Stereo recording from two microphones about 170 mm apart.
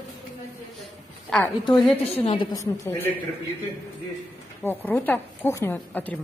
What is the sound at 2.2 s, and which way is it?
Speech, 30° left (ahead or behind).